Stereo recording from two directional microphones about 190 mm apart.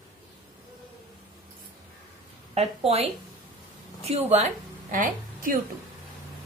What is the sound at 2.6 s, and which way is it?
Speech, 30° right (ahead or behind).